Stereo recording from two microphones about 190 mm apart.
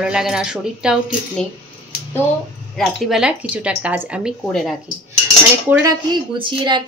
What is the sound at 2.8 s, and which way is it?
Speech, 5° right (ahead or behind).